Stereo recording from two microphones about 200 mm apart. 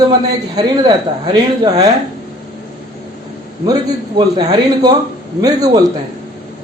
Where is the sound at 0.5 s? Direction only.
20° right (ahead or behind).